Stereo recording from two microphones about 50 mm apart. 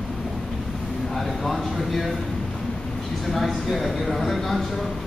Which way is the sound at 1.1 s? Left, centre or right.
Centre.